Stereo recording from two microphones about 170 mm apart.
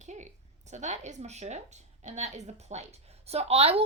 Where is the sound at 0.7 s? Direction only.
45° right (ahead or behind).